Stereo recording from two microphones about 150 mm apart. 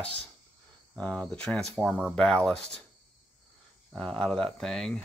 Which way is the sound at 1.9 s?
5° right (ahead or behind).